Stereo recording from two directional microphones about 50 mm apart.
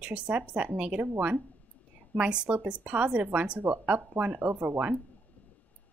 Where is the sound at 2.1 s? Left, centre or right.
Right.